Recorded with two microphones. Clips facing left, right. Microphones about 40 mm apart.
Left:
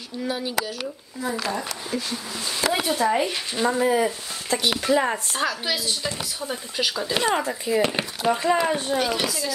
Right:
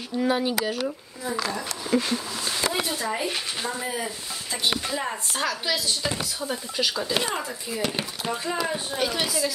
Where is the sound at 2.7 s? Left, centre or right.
Left.